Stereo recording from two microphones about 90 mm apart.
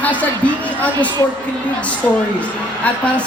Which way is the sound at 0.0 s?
15° left (ahead or behind).